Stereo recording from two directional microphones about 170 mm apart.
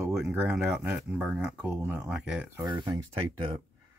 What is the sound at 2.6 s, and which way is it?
Speech, 25° right (ahead or behind).